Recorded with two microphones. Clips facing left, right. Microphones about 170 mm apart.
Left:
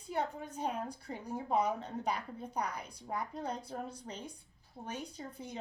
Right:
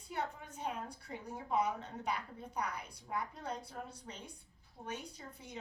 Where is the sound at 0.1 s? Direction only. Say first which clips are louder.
Left 4 dB; 35° left (ahead or behind).